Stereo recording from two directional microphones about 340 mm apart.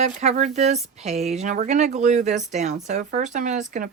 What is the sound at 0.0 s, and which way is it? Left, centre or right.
Speech, centre.